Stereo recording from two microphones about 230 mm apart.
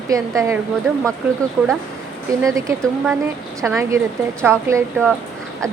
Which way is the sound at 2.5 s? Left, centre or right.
Centre.